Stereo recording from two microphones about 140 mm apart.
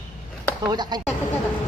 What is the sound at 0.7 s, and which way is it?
Speech, 30° right (ahead or behind).